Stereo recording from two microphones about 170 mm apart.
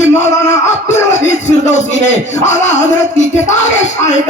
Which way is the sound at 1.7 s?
45° left (ahead or behind).